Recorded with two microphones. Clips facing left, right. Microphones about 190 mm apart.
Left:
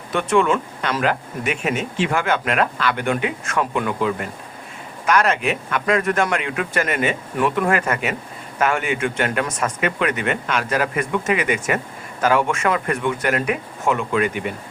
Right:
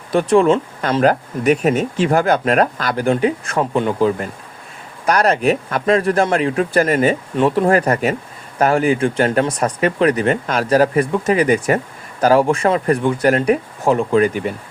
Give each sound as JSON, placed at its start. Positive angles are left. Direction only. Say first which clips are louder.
{"t": 0.1, "sound": "speech", "louder": "right 5 dB", "side_deg": -35}